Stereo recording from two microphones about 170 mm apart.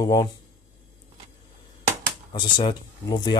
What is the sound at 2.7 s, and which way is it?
Speech, 25° left (ahead or behind).